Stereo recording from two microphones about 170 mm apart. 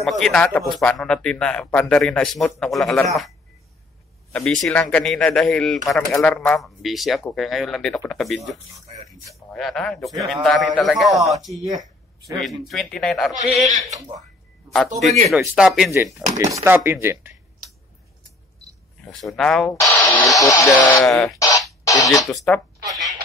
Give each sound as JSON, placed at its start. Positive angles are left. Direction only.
{"t": 0.0, "sound": "speech", "side_deg": 0}
{"t": 9.5, "sound": "speech", "side_deg": 5}
{"t": 13.8, "sound": "speech", "side_deg": -20}
{"t": 15.2, "sound": "speech", "side_deg": -5}
{"t": 16.3, "sound": "speech", "side_deg": -20}
{"t": 19.1, "sound": "speech", "side_deg": 0}
{"t": 19.7, "sound": "speech", "side_deg": 15}
{"t": 21.0, "sound": "speech", "side_deg": 0}
{"t": 21.4, "sound": "music", "side_deg": 20}
{"t": 22.3, "sound": "speech", "side_deg": 0}